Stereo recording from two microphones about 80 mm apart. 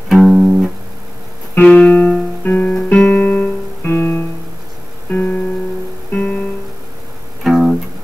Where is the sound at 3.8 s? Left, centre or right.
Left.